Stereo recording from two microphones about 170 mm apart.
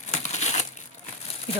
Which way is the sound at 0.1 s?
40° left (ahead or behind).